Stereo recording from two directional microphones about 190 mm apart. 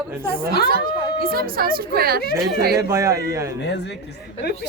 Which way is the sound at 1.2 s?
50° right (ahead or behind).